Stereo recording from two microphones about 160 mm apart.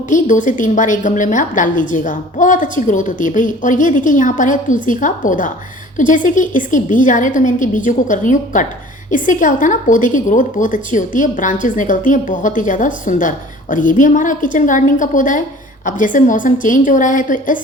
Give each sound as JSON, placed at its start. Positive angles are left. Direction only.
{"t": 0.1, "sound": "a woman's voice", "side_deg": 55}